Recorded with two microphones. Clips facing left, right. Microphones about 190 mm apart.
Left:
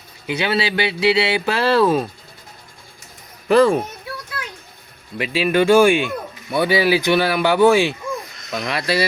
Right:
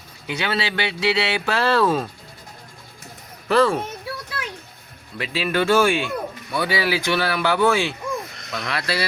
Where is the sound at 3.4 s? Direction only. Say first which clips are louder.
Left 4 dB; 15° left (ahead or behind).